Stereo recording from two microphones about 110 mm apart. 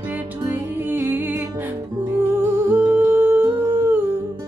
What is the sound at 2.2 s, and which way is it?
Humming, 20° right (ahead or behind).